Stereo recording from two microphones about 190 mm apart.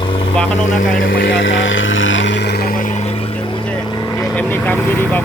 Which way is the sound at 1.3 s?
80° left.